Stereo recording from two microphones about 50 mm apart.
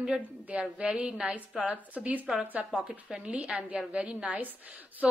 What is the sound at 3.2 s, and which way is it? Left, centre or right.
A woman's voice, right.